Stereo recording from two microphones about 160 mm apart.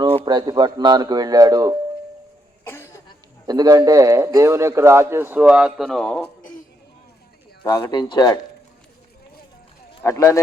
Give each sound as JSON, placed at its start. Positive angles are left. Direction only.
{"t": 0.3, "sound": "speech", "side_deg": -25}
{"t": 2.6, "sound": "cough", "side_deg": 15}
{"t": 3.4, "sound": "a man's voice", "side_deg": -25}
{"t": 7.6, "sound": "speech", "side_deg": 25}
{"t": 10.0, "sound": "speech", "side_deg": 20}